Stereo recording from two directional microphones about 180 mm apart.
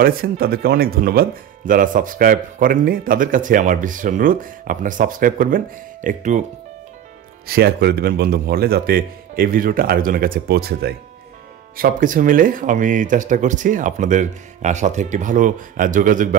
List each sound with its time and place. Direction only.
0.0 s a man's voice: 55° right (ahead or behind)
7.4 s a man's voice: 60° right (ahead or behind)
11.7 s a man's voice: 50° right (ahead or behind)